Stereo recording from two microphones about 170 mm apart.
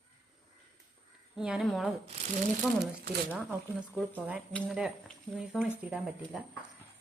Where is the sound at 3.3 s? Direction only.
5° right (ahead or behind).